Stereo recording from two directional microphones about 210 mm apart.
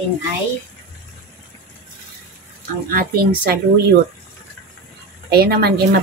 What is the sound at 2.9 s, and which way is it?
Speech, 45° right (ahead or behind).